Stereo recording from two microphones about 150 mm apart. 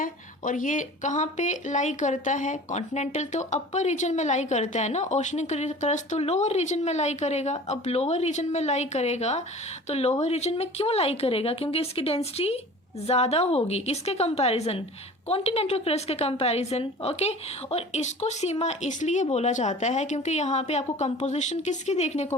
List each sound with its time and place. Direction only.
0.0 s speech: 60° left (ahead or behind)